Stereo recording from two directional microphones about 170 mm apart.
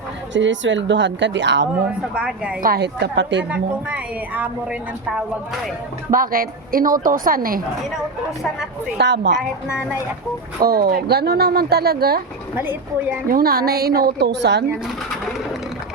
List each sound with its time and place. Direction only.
0.3 s a woman's voice: 90° right
2.1 s a woman's voice: 5° right (ahead or behind)
2.6 s a woman's voice: 65° right (ahead or behind); by 3.4 s 90° right
3.5 s a woman's voice: 5° right (ahead or behind)
6.1 s a woman's voice: 55° right (ahead or behind)
9.0 s a woman's voice: 90° right
10.6 s speech: 65° right (ahead or behind)
13.2 s a woman's voice: 60° right (ahead or behind); by 14.6 s 85° right